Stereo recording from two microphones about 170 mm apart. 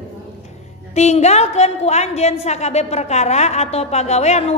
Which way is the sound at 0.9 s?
40° left (ahead or behind).